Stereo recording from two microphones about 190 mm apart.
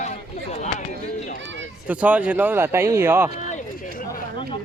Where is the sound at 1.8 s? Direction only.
5° right (ahead or behind).